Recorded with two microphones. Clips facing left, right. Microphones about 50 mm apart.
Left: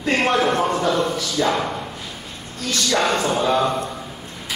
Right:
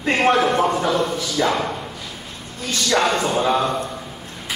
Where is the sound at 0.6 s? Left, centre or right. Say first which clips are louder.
Right 1 dB; centre.